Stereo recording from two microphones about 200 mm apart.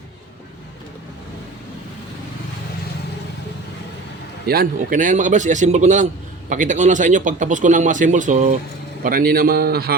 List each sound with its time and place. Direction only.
4.4 s a man's voice: 50° right (ahead or behind)